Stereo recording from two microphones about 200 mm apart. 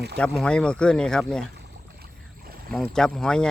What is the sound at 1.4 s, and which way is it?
Boat, 55° right (ahead or behind).